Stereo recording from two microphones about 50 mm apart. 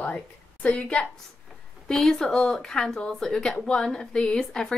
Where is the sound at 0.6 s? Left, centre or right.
Left.